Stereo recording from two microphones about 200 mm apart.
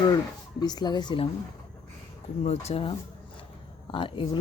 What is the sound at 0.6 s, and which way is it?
Speech, 20° left (ahead or behind).